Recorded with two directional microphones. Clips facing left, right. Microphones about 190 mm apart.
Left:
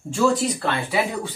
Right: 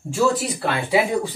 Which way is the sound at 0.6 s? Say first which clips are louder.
Right 3 dB; 15° right (ahead or behind).